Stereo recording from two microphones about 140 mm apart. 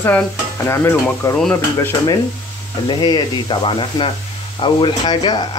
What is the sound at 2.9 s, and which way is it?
Speech, 30° left (ahead or behind).